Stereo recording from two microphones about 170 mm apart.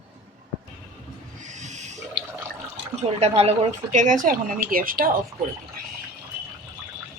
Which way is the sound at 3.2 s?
40° right (ahead or behind).